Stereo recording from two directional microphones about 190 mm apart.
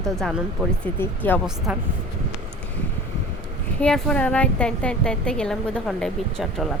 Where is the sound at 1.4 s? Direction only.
5° right (ahead or behind).